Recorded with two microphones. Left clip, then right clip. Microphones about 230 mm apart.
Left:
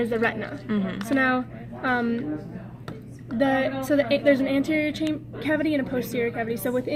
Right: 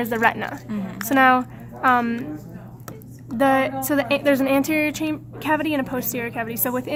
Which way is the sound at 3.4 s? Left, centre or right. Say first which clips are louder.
Right 4 dB; right.